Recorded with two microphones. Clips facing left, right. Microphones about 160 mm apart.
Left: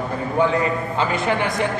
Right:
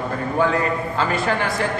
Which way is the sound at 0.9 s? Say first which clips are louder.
Left 1 dB; 20° left (ahead or behind).